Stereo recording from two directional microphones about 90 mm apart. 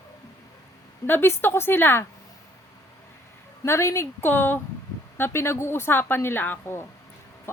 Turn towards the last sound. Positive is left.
turn(degrees=25)  # may be behind; listen again after turning